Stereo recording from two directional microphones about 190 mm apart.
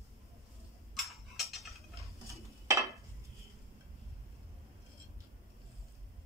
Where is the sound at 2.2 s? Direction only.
15° right (ahead or behind).